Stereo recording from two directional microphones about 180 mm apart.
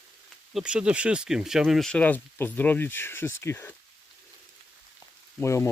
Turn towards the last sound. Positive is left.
turn(degrees=15)  # may be behind; listen again after turning